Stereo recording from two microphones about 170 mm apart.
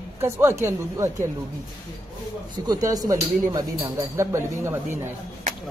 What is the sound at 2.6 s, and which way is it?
Speech, 20° right (ahead or behind).